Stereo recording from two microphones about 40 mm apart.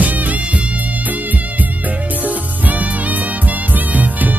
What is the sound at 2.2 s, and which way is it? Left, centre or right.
Music, right.